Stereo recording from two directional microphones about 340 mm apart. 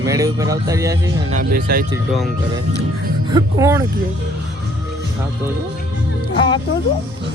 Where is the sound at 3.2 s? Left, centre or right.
Centre.